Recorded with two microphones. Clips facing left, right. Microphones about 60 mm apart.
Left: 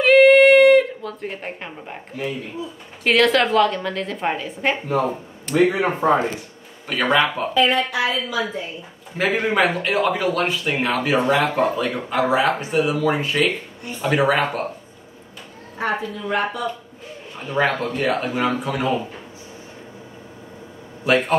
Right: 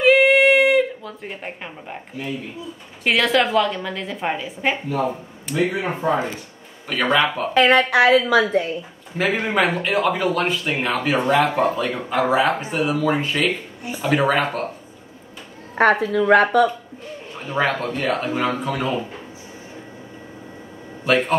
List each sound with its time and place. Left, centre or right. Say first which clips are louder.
0.0 s a sound: left 3 dB; centre
3.0 s a man's voice: left 2 dB; centre
5.5 s speech: left 4 dB; left
5.9 s speech: left 2 dB; left
6.9 s a man's voice: even; centre
7.5 s a woman's voice: right 5 dB; right
9.1 s a man's voice: left 1 dB; centre
15.8 s speech: right 8 dB; right
17.4 s a man's voice: left 1 dB; centre
21.0 s a man's voice: even; centre